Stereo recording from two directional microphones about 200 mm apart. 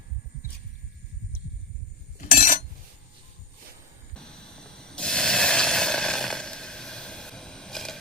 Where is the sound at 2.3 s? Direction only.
45° left (ahead or behind).